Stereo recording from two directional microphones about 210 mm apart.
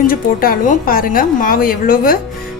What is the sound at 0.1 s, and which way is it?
A woman's voice, 45° left (ahead or behind).